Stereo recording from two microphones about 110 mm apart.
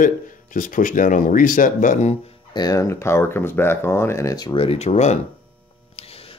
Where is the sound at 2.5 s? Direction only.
35° left (ahead or behind).